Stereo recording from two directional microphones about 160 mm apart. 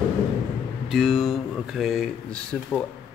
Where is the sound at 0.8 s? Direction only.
Centre (ahead or behind).